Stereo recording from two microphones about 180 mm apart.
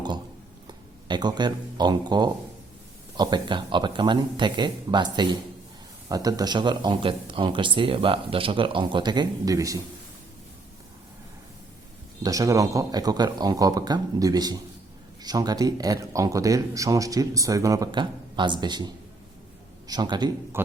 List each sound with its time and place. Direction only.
0.7 s speech: 25° right (ahead or behind)
12.2 s speech: 20° right (ahead or behind)
19.9 s speech: 25° right (ahead or behind)